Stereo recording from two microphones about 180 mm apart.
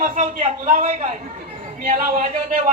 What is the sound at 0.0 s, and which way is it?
A man's voice, 50° right (ahead or behind).